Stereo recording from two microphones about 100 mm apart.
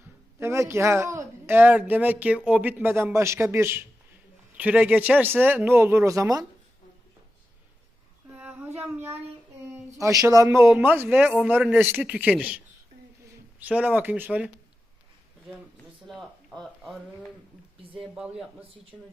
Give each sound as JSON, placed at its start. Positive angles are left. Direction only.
{"t": 0.3, "sound": "speech", "side_deg": -25}
{"t": 4.5, "sound": "speech", "side_deg": -15}
{"t": 8.3, "sound": "child singing", "side_deg": -15}
{"t": 10.0, "sound": "a man's voice", "side_deg": -35}
{"t": 13.6, "sound": "a man's voice", "side_deg": -15}
{"t": 16.0, "sound": "a sound", "side_deg": 0}